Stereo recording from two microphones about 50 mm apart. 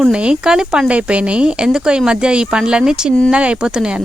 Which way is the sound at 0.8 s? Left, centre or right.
Right.